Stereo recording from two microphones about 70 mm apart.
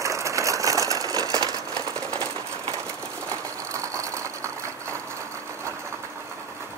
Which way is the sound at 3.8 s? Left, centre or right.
Right.